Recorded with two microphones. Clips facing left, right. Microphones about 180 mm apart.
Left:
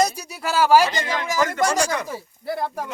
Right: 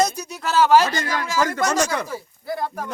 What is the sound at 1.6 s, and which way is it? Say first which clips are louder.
Speech: left 1 dB; 30° left (ahead or behind).